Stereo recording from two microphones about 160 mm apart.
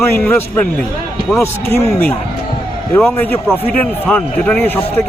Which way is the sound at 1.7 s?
10° left (ahead or behind).